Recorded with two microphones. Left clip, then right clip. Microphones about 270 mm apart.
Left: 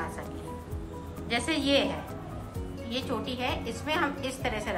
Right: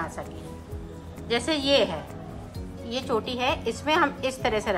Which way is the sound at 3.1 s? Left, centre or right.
Centre.